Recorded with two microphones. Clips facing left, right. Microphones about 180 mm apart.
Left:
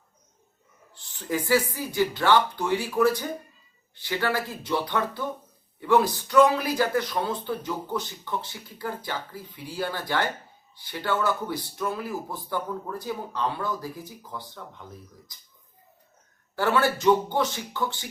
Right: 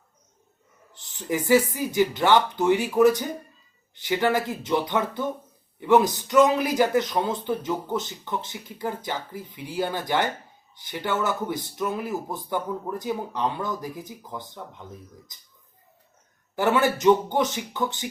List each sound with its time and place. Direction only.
0.9 s speech: 15° right (ahead or behind)
16.6 s speech: 20° right (ahead or behind)